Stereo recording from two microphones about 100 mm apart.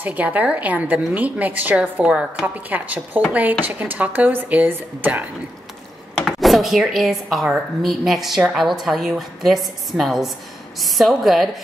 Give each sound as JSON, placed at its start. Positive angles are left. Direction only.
{"t": 0.0, "sound": "a woman's voice", "side_deg": -15}
{"t": 6.2, "sound": "a woman's voice", "side_deg": 0}